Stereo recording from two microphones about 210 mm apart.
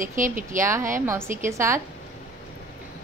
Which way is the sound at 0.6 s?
15° right (ahead or behind).